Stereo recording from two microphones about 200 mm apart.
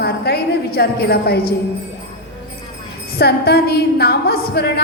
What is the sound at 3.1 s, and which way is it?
A woman's voice, 50° left (ahead or behind).